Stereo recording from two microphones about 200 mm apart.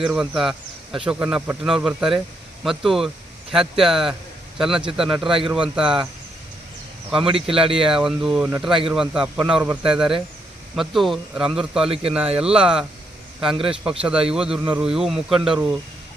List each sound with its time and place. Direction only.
0.0 s speech: 5° right (ahead or behind)
7.3 s speech: 25° right (ahead or behind)
7.9 s speech: centre (ahead or behind)